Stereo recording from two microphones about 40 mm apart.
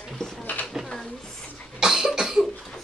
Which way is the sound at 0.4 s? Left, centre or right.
Left.